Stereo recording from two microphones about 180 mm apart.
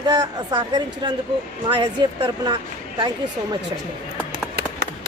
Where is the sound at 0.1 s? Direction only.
20° right (ahead or behind).